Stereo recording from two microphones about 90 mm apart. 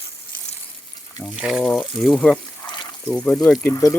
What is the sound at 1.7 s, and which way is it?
Speech, 10° left (ahead or behind).